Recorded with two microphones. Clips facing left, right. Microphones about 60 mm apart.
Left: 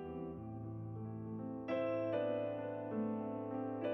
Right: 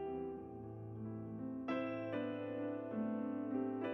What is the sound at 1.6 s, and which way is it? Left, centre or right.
Music, centre.